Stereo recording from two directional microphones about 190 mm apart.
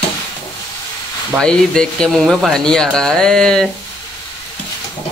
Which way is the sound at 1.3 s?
5° left (ahead or behind).